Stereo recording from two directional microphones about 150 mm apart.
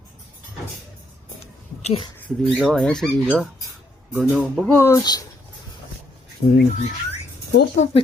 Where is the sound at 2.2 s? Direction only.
Centre (ahead or behind).